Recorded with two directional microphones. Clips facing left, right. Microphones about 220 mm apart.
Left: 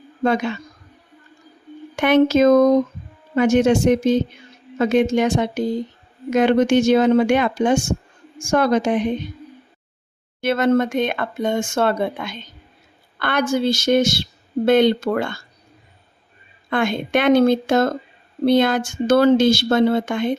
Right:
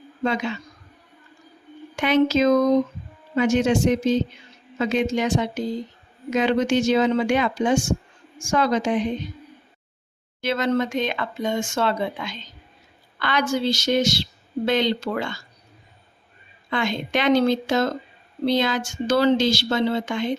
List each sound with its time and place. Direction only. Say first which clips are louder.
0.2 s a woman's voice: left 5 dB; 50° left (ahead or behind)
2.0 s a woman's voice: left 4 dB; 55° left (ahead or behind)
10.4 s a woman's voice: left 5 dB; 55° left (ahead or behind)
16.6 s a woman's voice: left 4 dB; 55° left (ahead or behind)